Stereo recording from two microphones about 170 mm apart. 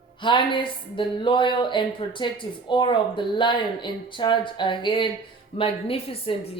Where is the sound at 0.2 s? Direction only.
30° left (ahead or behind).